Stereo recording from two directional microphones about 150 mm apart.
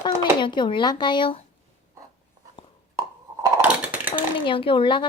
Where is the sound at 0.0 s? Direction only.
30° left (ahead or behind).